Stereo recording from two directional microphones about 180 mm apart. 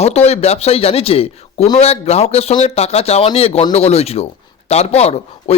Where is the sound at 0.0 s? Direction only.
35° left (ahead or behind).